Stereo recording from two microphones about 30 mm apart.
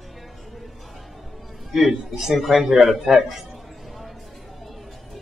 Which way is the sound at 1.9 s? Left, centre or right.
Centre.